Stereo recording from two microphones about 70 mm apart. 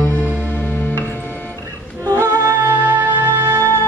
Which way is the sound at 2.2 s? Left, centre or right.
Right.